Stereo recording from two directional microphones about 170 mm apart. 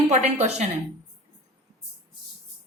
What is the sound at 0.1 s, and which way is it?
Speech, 40° right (ahead or behind).